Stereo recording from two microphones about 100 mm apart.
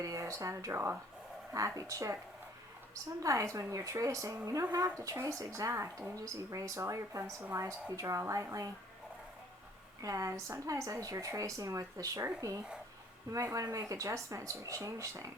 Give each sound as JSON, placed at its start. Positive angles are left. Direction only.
{"t": 0.0, "sound": "speech", "side_deg": -35}
{"t": 3.2, "sound": "speech", "side_deg": -30}
{"t": 10.0, "sound": "speech", "side_deg": -30}